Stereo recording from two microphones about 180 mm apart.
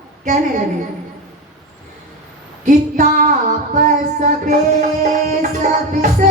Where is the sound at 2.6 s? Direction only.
45° right (ahead or behind).